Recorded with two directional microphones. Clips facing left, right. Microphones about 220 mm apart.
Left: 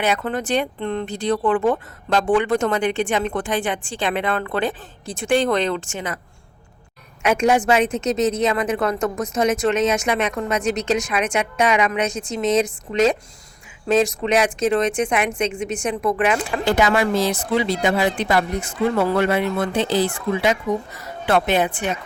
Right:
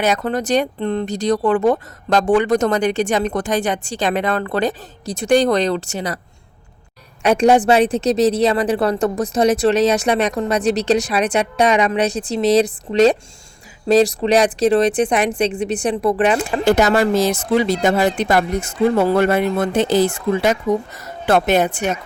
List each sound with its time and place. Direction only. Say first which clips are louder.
0.0 s a woman's voice: right 3 dB; 40° right (ahead or behind)
7.2 s a woman's voice: right 4 dB; 35° right (ahead or behind)